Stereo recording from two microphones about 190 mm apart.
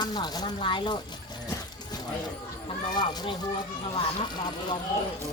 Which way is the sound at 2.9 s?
20° left (ahead or behind).